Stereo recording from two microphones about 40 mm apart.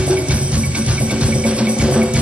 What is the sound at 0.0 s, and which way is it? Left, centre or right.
Music, right.